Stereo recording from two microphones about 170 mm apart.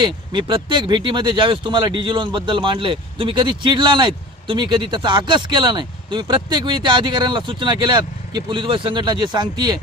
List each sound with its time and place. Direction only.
0.0 s speech: 30° right (ahead or behind)